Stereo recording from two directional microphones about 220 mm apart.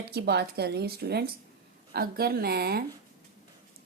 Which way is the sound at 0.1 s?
50° right (ahead or behind).